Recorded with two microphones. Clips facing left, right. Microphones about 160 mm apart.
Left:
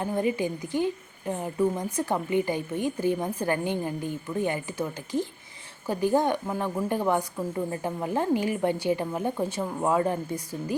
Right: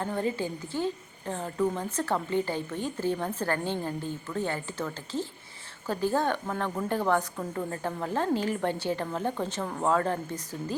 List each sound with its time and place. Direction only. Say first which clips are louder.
0.0 s a woman's voice: left 3 dB; 15° left (ahead or behind)